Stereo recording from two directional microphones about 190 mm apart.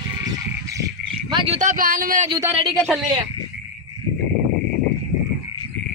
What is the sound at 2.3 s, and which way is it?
Speech, 20° right (ahead or behind).